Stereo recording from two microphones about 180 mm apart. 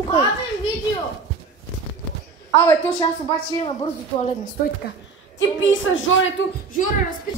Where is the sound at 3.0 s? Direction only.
30° left (ahead or behind).